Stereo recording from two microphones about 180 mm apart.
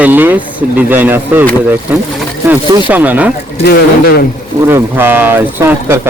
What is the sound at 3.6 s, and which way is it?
Speech, 60° left (ahead or behind).